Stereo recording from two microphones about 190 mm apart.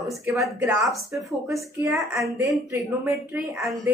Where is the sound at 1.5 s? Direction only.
15° right (ahead or behind).